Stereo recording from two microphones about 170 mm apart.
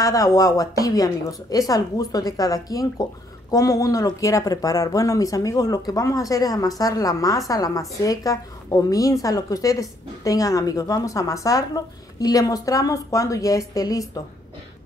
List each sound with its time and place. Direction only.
0.0 s a woman's voice: 20° left (ahead or behind)